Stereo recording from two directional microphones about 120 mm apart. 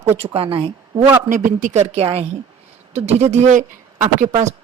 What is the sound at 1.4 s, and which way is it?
A woman's voice, 80° right.